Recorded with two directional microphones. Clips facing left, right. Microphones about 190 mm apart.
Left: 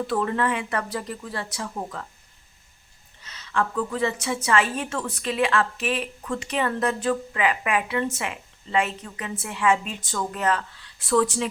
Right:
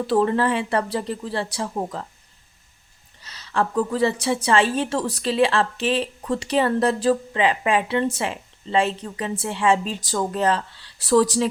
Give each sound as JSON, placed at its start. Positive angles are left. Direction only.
{"t": 0.1, "sound": "a woman's voice", "side_deg": -30}
{"t": 3.2, "sound": "a woman's voice", "side_deg": -35}